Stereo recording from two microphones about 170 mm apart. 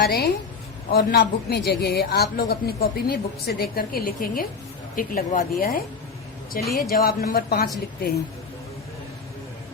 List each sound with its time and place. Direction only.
0.0 s a woman's voice: 70° left (ahead or behind)
6.6 s speech: centre (ahead or behind)
6.9 s a woman's voice: 65° left (ahead or behind)